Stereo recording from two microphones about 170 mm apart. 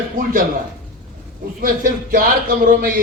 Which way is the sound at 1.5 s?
55° right (ahead or behind).